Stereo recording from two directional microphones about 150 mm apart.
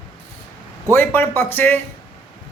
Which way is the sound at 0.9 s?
15° left (ahead or behind).